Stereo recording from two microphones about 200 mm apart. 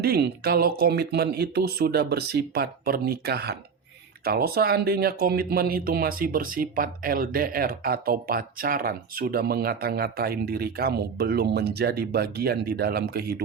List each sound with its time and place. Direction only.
0.0 s speech: 50° right (ahead or behind)